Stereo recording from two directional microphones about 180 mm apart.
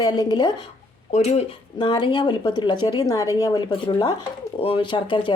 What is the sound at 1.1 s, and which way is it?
Speech, 40° left (ahead or behind).